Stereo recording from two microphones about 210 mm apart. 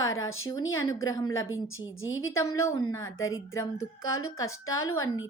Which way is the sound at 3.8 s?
85° left.